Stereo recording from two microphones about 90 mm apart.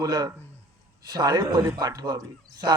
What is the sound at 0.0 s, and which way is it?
Speech, 45° right (ahead or behind).